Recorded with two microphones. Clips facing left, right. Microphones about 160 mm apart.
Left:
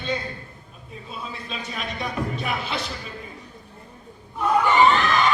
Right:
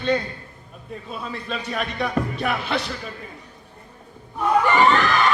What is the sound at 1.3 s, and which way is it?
Speech, 55° right (ahead or behind).